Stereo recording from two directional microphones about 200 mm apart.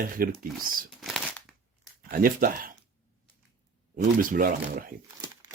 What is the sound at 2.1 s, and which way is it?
Speech, 45° right (ahead or behind).